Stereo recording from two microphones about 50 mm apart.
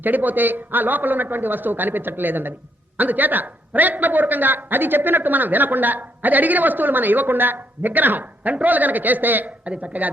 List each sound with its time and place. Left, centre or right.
0.0 s a man's voice: right